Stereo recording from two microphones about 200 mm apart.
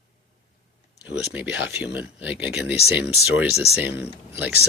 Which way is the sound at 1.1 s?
5° right (ahead or behind).